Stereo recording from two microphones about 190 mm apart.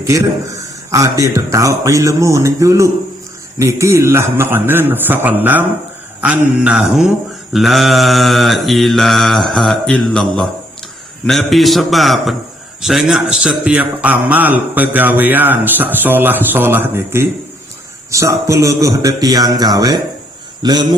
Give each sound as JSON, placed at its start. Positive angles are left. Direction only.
{"t": 0.9, "sound": "a man's voice", "side_deg": -15}
{"t": 6.2, "sound": "mantra", "side_deg": -5}
{"t": 12.8, "sound": "a man's voice", "side_deg": 0}